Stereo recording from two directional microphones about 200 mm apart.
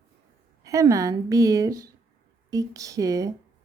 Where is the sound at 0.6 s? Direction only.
15° right (ahead or behind).